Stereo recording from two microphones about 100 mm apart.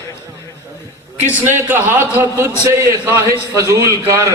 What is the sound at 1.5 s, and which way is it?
A man's voice, 20° right (ahead or behind).